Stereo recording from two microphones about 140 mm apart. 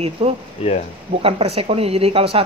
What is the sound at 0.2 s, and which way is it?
Speech, 40° right (ahead or behind).